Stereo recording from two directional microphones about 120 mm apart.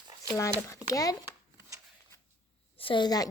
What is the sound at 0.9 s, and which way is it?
Speech, 30° left (ahead or behind).